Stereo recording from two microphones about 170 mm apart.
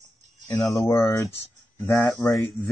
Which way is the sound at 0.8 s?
15° left (ahead or behind).